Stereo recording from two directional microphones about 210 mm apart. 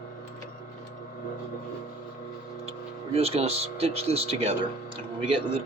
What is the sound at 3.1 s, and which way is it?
Speech, 30° right (ahead or behind).